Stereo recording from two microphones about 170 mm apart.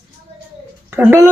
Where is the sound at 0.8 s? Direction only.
15° right (ahead or behind).